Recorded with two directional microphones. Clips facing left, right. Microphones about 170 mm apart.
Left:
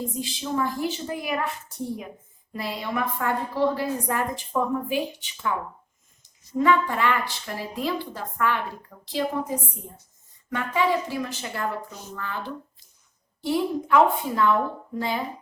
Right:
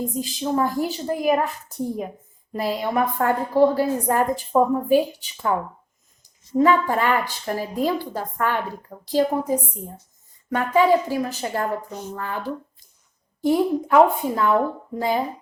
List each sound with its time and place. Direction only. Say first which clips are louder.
0.2 s a woman's voice: right 5 dB; 45° right (ahead or behind)
2.5 s a woman's voice: right 6 dB; 40° right (ahead or behind)
6.6 s a woman's voice: right 3 dB; 40° right (ahead or behind)
13.4 s a woman's voice: right 5 dB; 45° right (ahead or behind)